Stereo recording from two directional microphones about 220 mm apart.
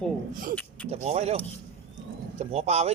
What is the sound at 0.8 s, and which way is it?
Speech, 30° right (ahead or behind).